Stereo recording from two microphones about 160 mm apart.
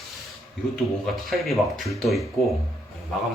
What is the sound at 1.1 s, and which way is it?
Speech, centre (ahead or behind).